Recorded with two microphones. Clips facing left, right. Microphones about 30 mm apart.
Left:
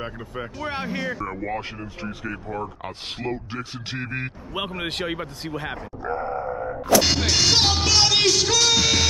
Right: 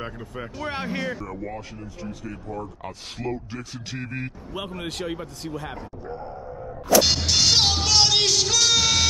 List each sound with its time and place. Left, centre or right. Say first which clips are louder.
0.0 s speech: left 2 dB; centre
1.2 s speech: left 5 dB; left
6.0 s grunt: left 10 dB; left
6.9 s music: even; centre